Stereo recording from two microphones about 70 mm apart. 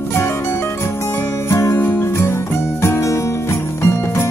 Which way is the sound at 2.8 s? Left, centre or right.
Left.